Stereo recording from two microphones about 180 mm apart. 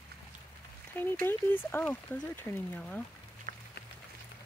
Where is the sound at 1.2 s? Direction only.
10° left (ahead or behind).